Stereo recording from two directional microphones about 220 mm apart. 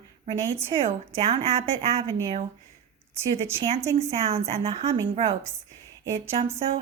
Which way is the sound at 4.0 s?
30° right (ahead or behind).